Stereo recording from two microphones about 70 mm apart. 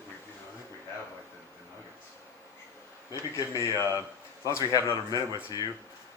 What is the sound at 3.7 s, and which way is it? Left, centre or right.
Speech, left.